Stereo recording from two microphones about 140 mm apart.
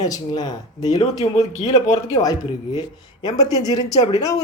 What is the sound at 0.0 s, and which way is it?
Speech, 25° left (ahead or behind).